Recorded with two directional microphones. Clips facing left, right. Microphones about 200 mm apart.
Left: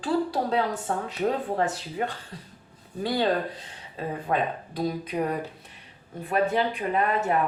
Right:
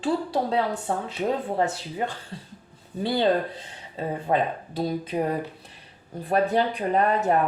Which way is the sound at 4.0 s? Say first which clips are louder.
Right 3 dB; 30° right (ahead or behind).